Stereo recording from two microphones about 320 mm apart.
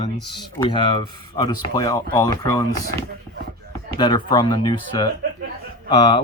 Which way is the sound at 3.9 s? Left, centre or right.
Centre.